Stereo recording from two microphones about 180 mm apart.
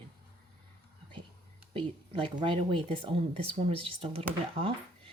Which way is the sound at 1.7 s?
25° right (ahead or behind).